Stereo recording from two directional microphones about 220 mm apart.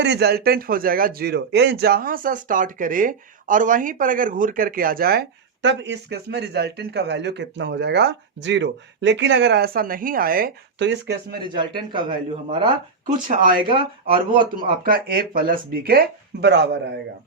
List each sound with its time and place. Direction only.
0.0 s speech: 50° right (ahead or behind)
11.4 s a man's voice: 20° right (ahead or behind)
13.2 s speech: 35° right (ahead or behind)
14.6 s speech: 40° right (ahead or behind)